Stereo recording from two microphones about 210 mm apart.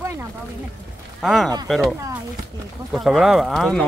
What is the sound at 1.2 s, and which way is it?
Speech, centre (ahead or behind).